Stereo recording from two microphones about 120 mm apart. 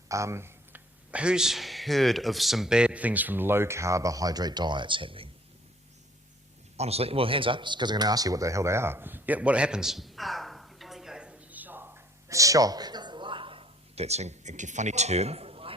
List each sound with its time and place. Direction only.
0.1 s a sound: 25° right (ahead or behind)
1.1 s speech: 10° right (ahead or behind); by 5.3 s 50° right (ahead or behind)
6.7 s speech: 60° right (ahead or behind)